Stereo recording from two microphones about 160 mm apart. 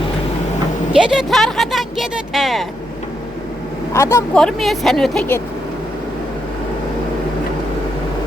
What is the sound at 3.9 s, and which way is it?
Speech, 20° left (ahead or behind).